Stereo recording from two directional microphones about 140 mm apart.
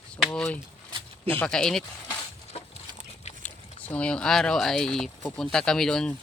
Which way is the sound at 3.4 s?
10° left (ahead or behind).